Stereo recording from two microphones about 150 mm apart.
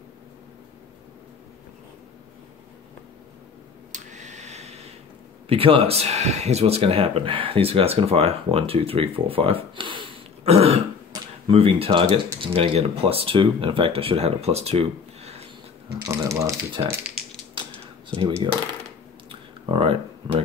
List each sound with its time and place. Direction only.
3.9 s a sound: 55° right (ahead or behind)
5.5 s speech: 40° right (ahead or behind)
16.0 s speech: 20° right (ahead or behind)
17.6 s a sound: 35° right (ahead or behind)
18.1 s speech: 10° left (ahead or behind)
19.6 s speech: 35° right (ahead or behind)